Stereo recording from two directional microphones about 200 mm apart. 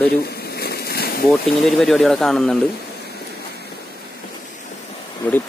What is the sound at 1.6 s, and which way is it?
Speech, centre (ahead or behind).